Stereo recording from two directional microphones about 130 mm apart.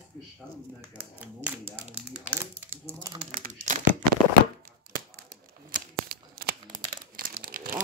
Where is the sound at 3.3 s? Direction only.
75° right (ahead or behind).